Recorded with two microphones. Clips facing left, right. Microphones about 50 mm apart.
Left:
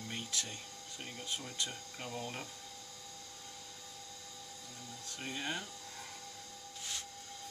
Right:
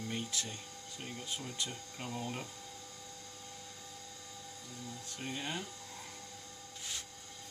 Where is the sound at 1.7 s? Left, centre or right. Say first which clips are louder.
Right 1 dB; centre.